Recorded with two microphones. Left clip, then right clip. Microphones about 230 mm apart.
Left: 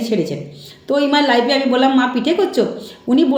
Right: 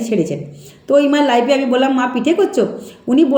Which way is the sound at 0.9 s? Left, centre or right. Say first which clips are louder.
Right 2 dB; centre.